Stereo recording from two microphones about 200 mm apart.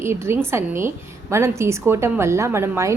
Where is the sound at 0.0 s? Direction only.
15° right (ahead or behind).